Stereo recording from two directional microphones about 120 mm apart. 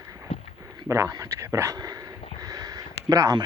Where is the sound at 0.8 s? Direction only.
20° right (ahead or behind).